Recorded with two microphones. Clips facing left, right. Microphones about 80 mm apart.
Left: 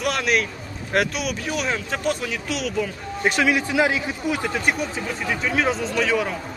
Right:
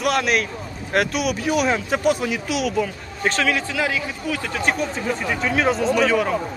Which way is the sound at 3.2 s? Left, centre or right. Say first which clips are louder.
Left 1 dB; centre.